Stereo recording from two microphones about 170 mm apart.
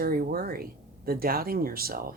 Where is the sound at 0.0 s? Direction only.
60° right (ahead or behind).